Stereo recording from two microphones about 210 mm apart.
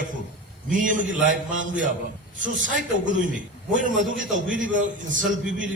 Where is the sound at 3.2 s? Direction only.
40° right (ahead or behind).